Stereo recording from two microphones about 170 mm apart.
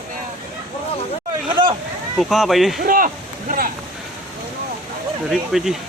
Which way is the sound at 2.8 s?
55° right (ahead or behind).